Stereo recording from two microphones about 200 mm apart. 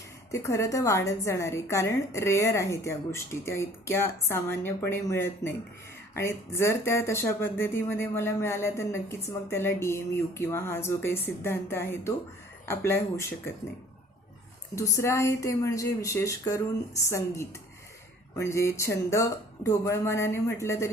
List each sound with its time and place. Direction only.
0.3 s speech: 15° left (ahead or behind)
14.8 s speech: 15° left (ahead or behind)